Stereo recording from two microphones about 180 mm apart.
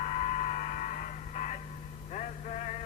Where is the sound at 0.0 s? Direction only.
40° left (ahead or behind).